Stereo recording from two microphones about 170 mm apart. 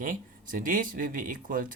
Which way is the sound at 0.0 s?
55° right (ahead or behind).